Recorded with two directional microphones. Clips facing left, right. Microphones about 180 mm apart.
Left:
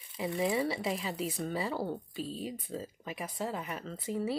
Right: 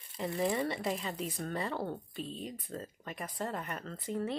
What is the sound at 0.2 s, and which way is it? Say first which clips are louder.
Speech: left 1 dB; centre (ahead or behind).